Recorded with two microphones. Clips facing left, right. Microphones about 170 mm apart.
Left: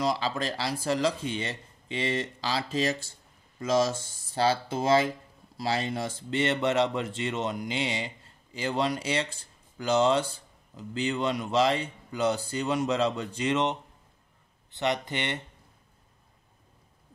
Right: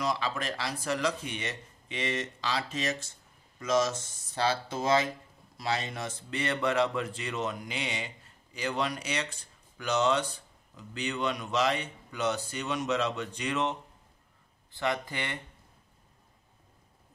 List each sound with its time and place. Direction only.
0.0 s speech: 30° left (ahead or behind)